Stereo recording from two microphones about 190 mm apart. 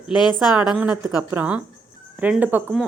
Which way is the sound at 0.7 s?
5° right (ahead or behind).